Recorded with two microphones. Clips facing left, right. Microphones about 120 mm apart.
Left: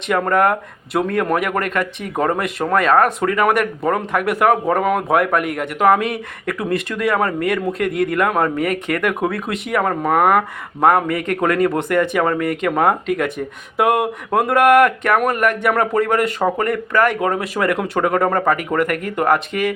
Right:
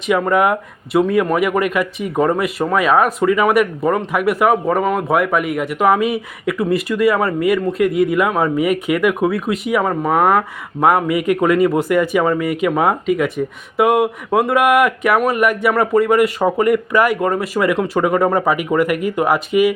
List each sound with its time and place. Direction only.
0.1 s speech: 5° right (ahead or behind)